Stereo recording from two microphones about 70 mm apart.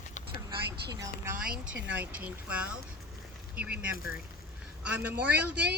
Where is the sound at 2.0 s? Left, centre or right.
Right.